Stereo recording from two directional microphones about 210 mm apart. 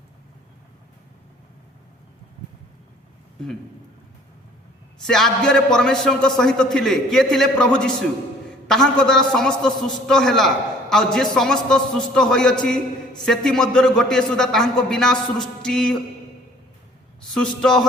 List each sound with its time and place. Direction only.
5.0 s a man's voice: 5° left (ahead or behind)
17.6 s a man's voice: centre (ahead or behind)